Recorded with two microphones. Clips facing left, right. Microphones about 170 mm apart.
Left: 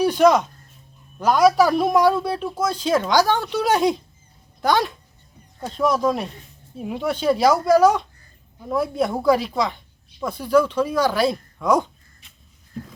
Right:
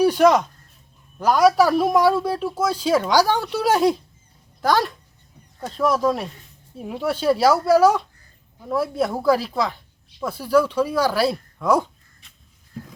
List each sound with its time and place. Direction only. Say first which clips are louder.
0.0 s speech: even; 5° right (ahead or behind)